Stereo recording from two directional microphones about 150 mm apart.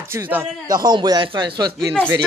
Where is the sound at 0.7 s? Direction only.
30° right (ahead or behind).